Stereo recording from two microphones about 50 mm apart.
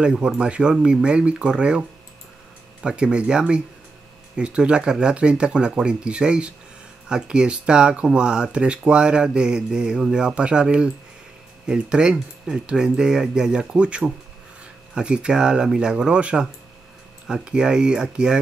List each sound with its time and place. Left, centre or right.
0.0 s speech: centre